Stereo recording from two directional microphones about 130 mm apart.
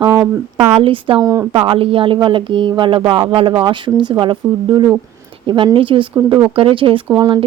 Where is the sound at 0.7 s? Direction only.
45° right (ahead or behind).